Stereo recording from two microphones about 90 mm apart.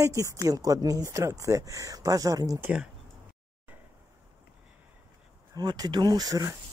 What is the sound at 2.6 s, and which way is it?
Speech, 15° right (ahead or behind).